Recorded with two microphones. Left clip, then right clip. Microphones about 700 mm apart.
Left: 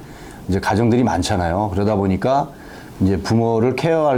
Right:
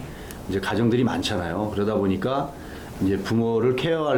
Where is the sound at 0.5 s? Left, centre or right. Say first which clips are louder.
Left 6 dB; left.